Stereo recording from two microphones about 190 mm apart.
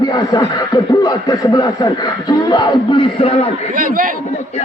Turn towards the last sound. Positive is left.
turn(degrees=25)  # may be behind; listen again after turning